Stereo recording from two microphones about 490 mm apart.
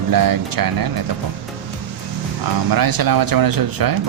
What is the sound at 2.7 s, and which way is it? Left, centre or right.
Speech, right.